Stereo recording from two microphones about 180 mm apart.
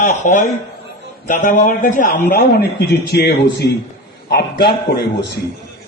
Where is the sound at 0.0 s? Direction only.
45° left (ahead or behind).